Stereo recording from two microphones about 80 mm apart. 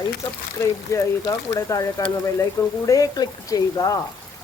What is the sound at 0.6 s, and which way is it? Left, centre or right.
Speech, left.